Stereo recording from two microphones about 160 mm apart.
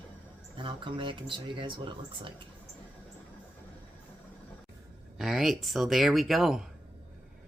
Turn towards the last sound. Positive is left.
turn(degrees=0)  # may be behind; listen again after turning